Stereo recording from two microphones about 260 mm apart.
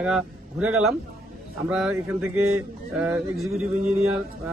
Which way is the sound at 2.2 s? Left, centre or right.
Right.